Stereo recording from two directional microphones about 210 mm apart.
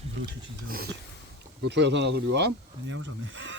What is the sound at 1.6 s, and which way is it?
Speech, 55° right (ahead or behind).